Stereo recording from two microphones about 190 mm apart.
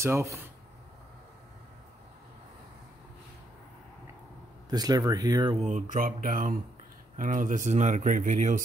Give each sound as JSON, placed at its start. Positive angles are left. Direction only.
{"t": 0.0, "sound": "speech", "side_deg": -15}
{"t": 4.6, "sound": "speech", "side_deg": -20}
{"t": 5.6, "sound": "speech", "side_deg": -40}